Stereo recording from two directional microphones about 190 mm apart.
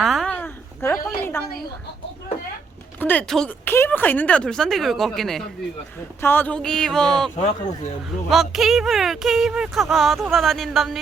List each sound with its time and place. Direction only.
0.0 s a sound: centre (ahead or behind)
1.2 s a woman's voice: 10° left (ahead or behind)
3.0 s speech: 10° left (ahead or behind)
7.3 s speech: 35° left (ahead or behind)
8.3 s speech: centre (ahead or behind)